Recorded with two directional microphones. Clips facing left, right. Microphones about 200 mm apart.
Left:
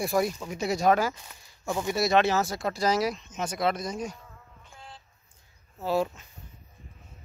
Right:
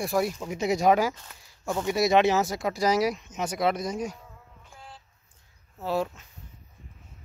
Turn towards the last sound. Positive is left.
turn(degrees=0)  # may be behind; listen again after turning